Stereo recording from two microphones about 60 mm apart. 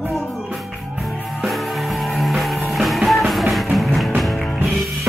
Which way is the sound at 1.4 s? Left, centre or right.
Centre.